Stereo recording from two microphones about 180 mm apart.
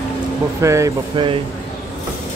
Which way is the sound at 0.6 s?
15° right (ahead or behind).